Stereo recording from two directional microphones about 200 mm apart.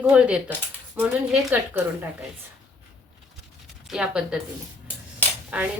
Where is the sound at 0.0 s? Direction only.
5° right (ahead or behind).